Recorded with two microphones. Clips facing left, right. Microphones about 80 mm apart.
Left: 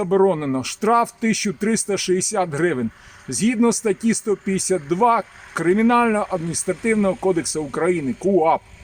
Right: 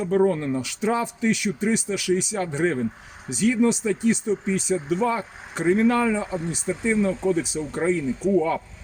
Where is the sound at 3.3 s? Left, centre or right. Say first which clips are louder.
Left 3 dB; left.